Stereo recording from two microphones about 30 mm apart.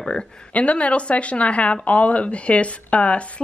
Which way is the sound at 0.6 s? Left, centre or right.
Left.